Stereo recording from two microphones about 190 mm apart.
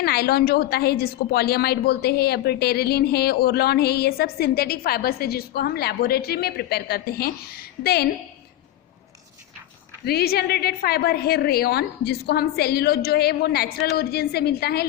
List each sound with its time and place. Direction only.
0.0 s a woman's voice: 55° left (ahead or behind)
10.1 s a woman's voice: 55° left (ahead or behind)